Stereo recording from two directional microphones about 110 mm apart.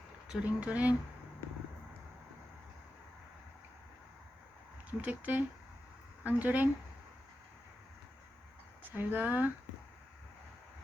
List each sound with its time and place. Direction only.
0.3 s speech: 10° right (ahead or behind)
4.9 s speech: 15° right (ahead or behind)
8.8 s speech: 15° right (ahead or behind)